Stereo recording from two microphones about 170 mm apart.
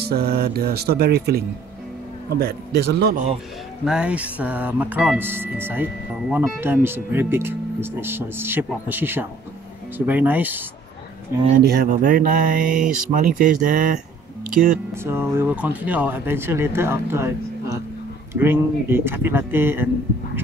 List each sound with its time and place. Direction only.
0.1 s speech: 70° right (ahead or behind)
3.8 s speech: 5° right (ahead or behind)
11.5 s speech: 55° right (ahead or behind)
15.0 s speech: 15° right (ahead or behind)